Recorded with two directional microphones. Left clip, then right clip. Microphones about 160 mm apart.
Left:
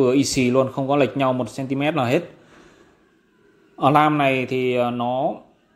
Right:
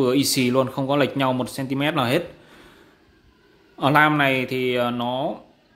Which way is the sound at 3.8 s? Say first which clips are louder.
Left 1 dB; 10° left (ahead or behind).